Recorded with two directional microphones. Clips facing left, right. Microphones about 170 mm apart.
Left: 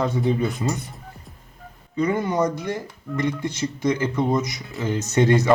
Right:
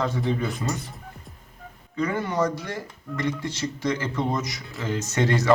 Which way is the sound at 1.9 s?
20° left (ahead or behind).